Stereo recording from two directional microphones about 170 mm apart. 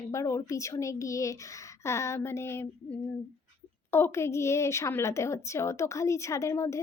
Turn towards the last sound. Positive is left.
turn(degrees=15)  # may be behind; listen again after turning